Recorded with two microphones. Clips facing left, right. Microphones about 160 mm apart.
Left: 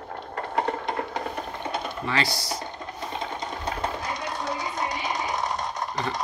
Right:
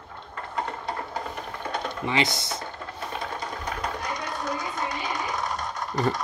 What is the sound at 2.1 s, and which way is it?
Speech, 20° right (ahead or behind).